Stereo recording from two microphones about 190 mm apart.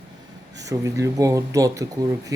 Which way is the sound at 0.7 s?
15° right (ahead or behind).